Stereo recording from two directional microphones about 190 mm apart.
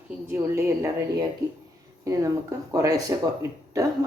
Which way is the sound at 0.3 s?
15° right (ahead or behind).